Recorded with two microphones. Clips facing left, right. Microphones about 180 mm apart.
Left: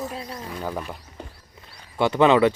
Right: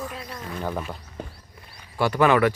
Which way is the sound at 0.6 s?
Centre (ahead or behind).